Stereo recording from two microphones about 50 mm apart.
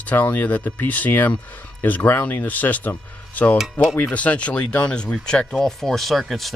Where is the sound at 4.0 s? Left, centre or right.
Left.